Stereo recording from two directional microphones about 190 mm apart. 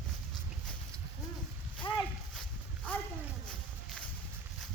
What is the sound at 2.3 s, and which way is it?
Walk, 5° left (ahead or behind).